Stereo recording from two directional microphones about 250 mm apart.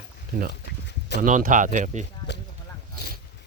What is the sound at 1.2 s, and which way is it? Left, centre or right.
Speech, right.